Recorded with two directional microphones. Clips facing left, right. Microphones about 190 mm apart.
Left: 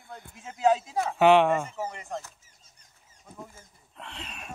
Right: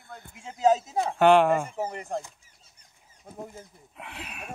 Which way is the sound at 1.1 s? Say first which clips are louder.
Right 1 dB; centre (ahead or behind).